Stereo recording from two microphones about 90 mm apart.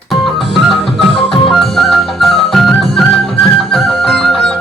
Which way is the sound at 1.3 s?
5° left (ahead or behind).